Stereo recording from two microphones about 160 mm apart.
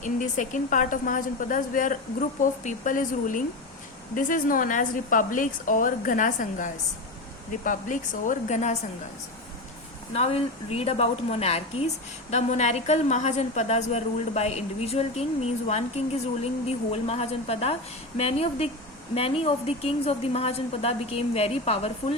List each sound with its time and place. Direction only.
0.0 s a woman's voice: 55° left (ahead or behind)
10.1 s a woman's voice: 40° left (ahead or behind)